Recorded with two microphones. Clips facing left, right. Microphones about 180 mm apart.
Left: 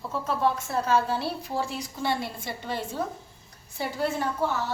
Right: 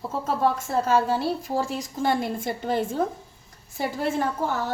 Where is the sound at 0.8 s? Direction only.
45° right (ahead or behind).